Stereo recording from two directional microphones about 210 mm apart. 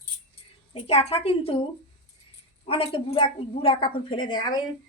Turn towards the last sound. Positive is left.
turn(degrees=20)  # may be behind; listen again after turning